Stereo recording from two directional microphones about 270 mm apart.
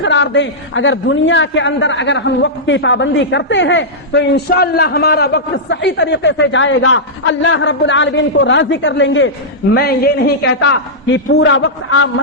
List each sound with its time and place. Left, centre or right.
0.0 s a man's voice: left